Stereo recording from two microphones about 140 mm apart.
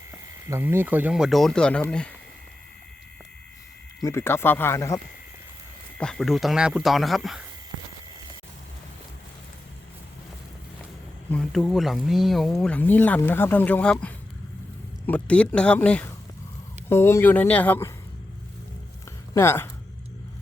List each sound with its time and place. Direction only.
0.1 s speech: 20° right (ahead or behind); by 2.1 s 10° left (ahead or behind)
4.0 s speech: 20° left (ahead or behind)
6.0 s speech: 5° left (ahead or behind)
11.3 s speech: 5° left (ahead or behind)
19.3 s speech: 20° left (ahead or behind)